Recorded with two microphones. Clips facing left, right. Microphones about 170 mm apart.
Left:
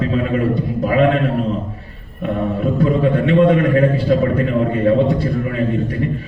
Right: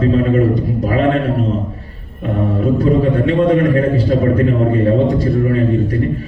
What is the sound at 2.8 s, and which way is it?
A man's voice, 40° right (ahead or behind).